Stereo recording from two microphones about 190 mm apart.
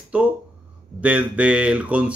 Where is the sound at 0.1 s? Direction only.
5° right (ahead or behind).